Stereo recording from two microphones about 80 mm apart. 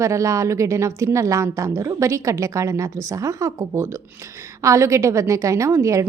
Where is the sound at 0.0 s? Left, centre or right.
Right.